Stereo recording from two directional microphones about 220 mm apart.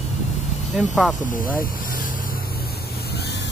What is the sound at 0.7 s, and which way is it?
Speech, centre (ahead or behind).